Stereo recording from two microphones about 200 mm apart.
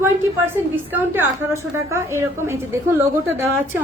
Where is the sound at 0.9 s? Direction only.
10° right (ahead or behind).